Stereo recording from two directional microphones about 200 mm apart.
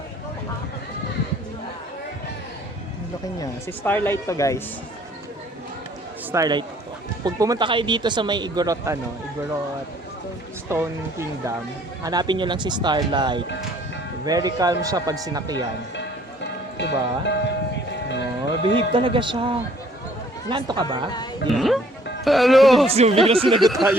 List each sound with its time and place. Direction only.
3.3 s speech: 15° left (ahead or behind)
6.3 s speech: 20° right (ahead or behind)
10.7 s speech: 15° right (ahead or behind)
16.7 s speech: 60° left (ahead or behind)
18.6 s speech: 25° right (ahead or behind)
21.5 s speech: centre (ahead or behind)
22.9 s speech: 30° right (ahead or behind)
23.6 s speech: centre (ahead or behind)